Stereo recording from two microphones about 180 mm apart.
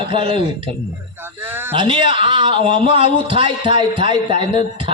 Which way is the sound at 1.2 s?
10° right (ahead or behind).